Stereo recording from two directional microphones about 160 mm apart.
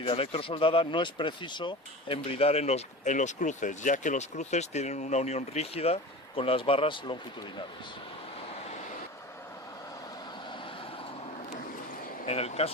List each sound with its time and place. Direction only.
0.0 s speech: 35° left (ahead or behind)
12.2 s speech: 40° left (ahead or behind)